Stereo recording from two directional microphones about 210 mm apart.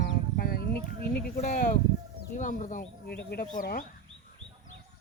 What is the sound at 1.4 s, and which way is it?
Speech, 40° left (ahead or behind).